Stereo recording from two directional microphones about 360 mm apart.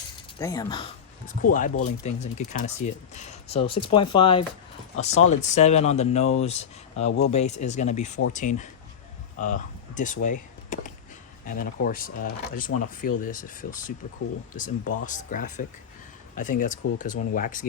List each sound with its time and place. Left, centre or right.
0.3 s speech: centre
1.4 s speech: left
10.7 s a sound: left
11.4 s speech: left